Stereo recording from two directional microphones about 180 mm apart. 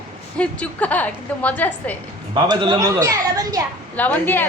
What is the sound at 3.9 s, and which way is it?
Speech, 10° left (ahead or behind).